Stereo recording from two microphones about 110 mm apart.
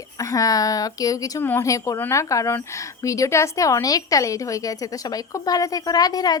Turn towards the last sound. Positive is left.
turn(degrees=35)  # may be behind; listen again after turning